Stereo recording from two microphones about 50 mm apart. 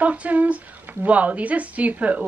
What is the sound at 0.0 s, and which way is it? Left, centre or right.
A woman's voice, right.